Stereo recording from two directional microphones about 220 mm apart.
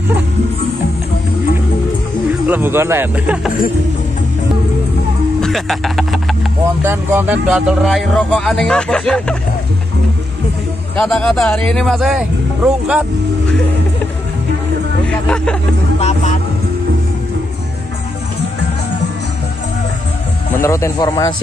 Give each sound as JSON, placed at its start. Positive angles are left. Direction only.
{"t": 2.4, "sound": "speech", "side_deg": -10}
{"t": 5.4, "sound": "speech", "side_deg": 0}
{"t": 6.8, "sound": "speech", "side_deg": -10}
{"t": 11.0, "sound": "speech", "side_deg": 5}
{"t": 15.0, "sound": "speech", "side_deg": 5}
{"t": 16.0, "sound": "music", "side_deg": 30}
{"t": 20.5, "sound": "a man's voice", "side_deg": 10}